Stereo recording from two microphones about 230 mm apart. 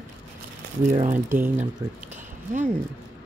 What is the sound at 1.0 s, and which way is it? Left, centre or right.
Speech, right.